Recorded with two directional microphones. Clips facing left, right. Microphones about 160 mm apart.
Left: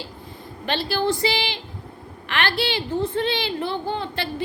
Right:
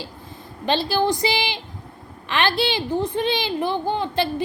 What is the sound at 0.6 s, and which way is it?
A woman's voice, 20° right (ahead or behind).